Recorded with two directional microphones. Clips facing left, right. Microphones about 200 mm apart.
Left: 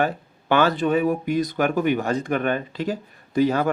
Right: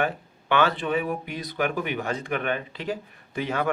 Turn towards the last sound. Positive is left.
turn(degrees=40)  # may be behind; listen again after turning